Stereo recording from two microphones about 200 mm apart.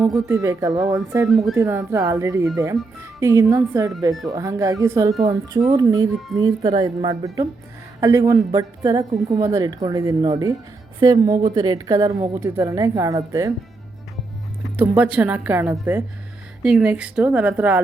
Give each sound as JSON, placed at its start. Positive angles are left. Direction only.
{"t": 0.0, "sound": "a woman's voice", "side_deg": -10}
{"t": 14.8, "sound": "a woman's voice", "side_deg": -5}